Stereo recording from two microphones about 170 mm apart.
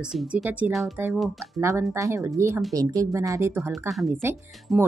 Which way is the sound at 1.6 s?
15° right (ahead or behind).